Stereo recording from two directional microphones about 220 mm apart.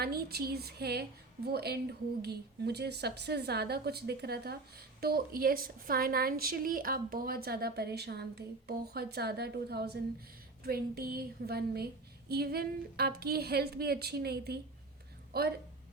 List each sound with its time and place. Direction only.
0.0 s a woman's voice: 45° right (ahead or behind)